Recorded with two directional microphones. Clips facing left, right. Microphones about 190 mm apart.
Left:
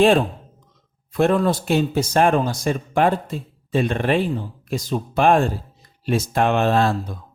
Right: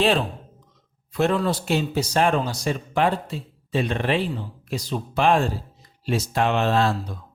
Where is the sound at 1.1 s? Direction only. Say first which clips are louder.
Left 4 dB; 50° left (ahead or behind).